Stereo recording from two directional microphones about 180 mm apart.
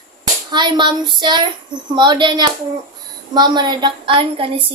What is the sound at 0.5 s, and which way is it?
A woman's voice, 25° right (ahead or behind).